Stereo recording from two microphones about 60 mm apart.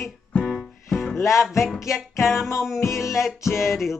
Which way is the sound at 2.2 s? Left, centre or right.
Centre.